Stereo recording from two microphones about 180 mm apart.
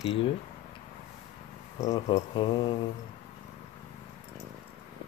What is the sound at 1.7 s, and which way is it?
Speech, 20° left (ahead or behind).